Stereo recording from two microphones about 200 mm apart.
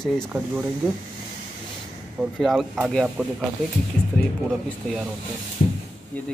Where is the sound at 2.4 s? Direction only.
Centre (ahead or behind).